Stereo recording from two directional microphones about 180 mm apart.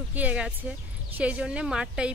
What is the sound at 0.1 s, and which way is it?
Music, 10° right (ahead or behind).